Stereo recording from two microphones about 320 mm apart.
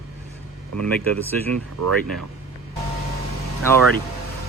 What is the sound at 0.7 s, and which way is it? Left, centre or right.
Speech, right.